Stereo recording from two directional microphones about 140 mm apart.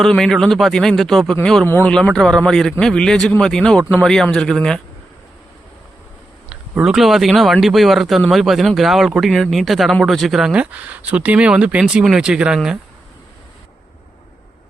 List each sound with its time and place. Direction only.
0.0 s speech: 5° left (ahead or behind)
1.6 s speech: 15° left (ahead or behind)
1.9 s speech: 5° left (ahead or behind)
6.5 s speech: 5° right (ahead or behind)